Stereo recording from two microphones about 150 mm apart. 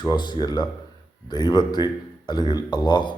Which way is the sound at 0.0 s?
30° left (ahead or behind).